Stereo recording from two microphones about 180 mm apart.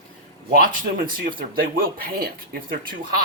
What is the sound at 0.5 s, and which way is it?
Speech, 50° right (ahead or behind).